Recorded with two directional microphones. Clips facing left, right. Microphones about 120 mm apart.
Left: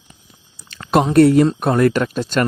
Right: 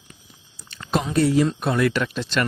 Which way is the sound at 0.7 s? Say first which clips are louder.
Left 9 dB; 60° left (ahead or behind).